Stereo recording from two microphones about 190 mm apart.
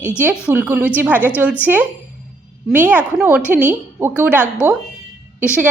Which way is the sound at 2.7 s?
10° right (ahead or behind).